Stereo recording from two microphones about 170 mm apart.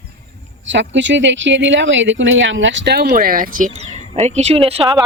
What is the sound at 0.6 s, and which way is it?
Speech, 90° right.